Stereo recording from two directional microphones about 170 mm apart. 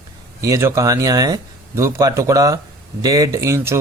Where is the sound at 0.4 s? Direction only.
15° right (ahead or behind).